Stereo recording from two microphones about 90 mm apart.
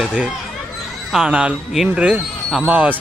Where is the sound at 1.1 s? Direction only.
10° right (ahead or behind).